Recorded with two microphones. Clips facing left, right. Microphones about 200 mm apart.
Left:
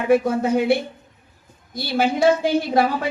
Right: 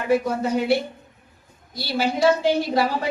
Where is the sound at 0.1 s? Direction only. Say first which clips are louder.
Left 3 dB; 50° left (ahead or behind).